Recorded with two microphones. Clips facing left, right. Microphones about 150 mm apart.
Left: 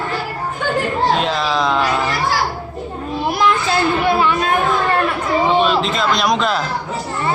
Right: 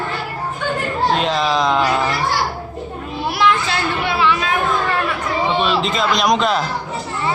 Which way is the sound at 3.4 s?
45° left (ahead or behind).